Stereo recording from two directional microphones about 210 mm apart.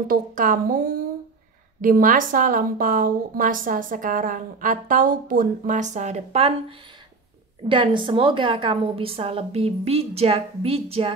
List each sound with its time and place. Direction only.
0.1 s a woman's voice: 40° right (ahead or behind)
7.6 s a woman's voice: 25° right (ahead or behind)